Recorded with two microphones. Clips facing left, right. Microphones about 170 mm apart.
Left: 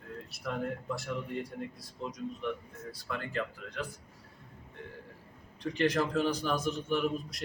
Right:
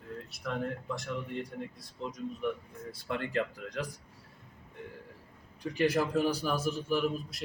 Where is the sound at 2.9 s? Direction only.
30° right (ahead or behind).